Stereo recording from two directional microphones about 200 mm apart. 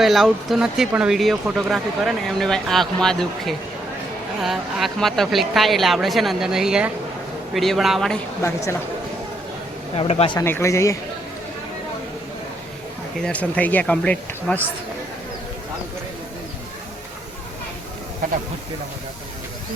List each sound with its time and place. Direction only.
0.0 s speech: centre (ahead or behind)
9.9 s speech: 30° left (ahead or behind)
10.3 s speech: 10° left (ahead or behind)
13.2 s speech: 5° left (ahead or behind)